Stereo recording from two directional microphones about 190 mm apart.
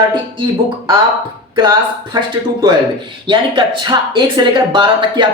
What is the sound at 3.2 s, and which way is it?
Speech, 25° right (ahead or behind).